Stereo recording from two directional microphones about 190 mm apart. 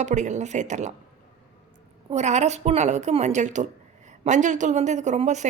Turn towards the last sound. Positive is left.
turn(degrees=-40)  # may be behind; listen again after turning